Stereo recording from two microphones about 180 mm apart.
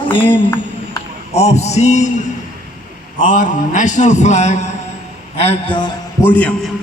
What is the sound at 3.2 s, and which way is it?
A man's voice, 45° left (ahead or behind).